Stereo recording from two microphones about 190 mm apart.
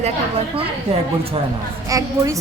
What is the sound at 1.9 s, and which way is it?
Speech, 20° right (ahead or behind).